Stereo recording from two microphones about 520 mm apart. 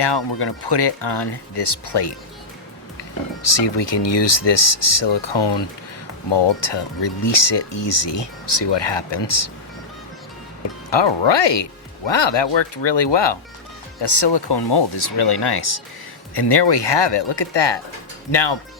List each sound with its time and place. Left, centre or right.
0.0 s speech: left
10.9 s speech: left